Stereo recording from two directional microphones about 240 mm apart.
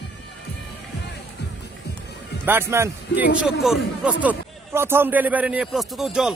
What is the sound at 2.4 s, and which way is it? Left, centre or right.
A man's voice, centre.